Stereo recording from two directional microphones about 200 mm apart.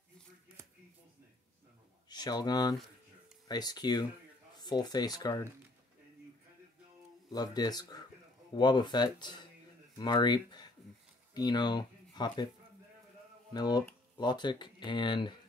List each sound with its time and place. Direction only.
2.0 s speech: 20° left (ahead or behind)
7.2 s speech: 20° left (ahead or behind)
13.5 s speech: 20° left (ahead or behind)